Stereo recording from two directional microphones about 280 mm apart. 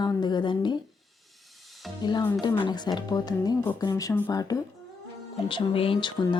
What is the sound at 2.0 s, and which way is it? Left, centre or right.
A woman's voice, centre.